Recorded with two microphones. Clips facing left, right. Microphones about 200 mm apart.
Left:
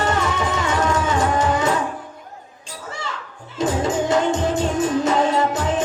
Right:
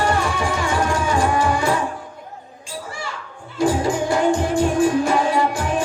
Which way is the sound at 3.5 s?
20° left (ahead or behind).